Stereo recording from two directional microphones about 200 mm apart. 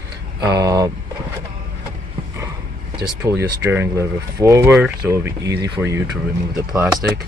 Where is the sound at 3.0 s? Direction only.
10° right (ahead or behind).